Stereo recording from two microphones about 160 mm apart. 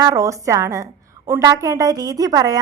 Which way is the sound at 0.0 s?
20° right (ahead or behind).